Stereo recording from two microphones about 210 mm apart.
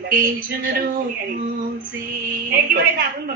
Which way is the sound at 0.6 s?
45° right (ahead or behind).